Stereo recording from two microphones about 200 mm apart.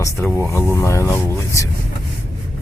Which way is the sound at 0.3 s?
10° left (ahead or behind).